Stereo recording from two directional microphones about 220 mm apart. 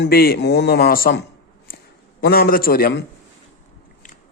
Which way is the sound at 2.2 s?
45° left (ahead or behind).